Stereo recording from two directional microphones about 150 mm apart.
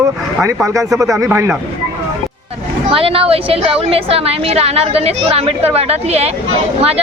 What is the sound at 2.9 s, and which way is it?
A woman's voice, 40° right (ahead or behind).